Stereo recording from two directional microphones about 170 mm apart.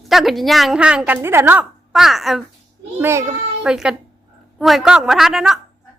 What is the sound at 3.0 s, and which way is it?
Speech, 15° right (ahead or behind).